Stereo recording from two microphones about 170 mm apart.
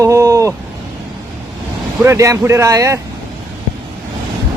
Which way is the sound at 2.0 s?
15° right (ahead or behind).